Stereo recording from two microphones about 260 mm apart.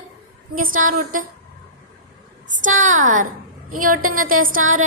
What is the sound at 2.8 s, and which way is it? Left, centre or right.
Speech, right.